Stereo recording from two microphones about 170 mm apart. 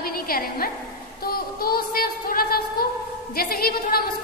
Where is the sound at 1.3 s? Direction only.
60° left (ahead or behind).